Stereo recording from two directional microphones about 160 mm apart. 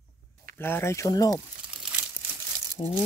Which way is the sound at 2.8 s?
30° left (ahead or behind).